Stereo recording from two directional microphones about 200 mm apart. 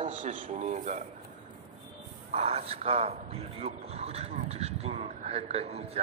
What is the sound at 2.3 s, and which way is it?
A man's voice, 30° right (ahead or behind).